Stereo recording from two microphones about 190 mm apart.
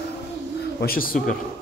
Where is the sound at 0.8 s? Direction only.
50° left (ahead or behind).